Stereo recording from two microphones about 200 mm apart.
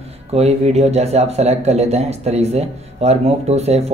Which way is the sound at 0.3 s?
30° right (ahead or behind).